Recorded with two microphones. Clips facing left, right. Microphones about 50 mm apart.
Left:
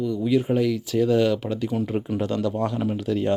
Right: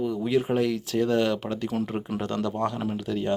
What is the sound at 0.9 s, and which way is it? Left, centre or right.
Speech, centre.